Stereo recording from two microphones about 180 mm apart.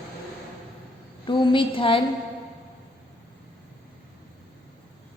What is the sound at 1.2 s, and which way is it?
Speech, 25° left (ahead or behind).